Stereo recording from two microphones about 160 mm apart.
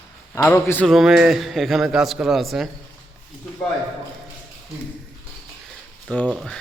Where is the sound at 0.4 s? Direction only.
10° left (ahead or behind).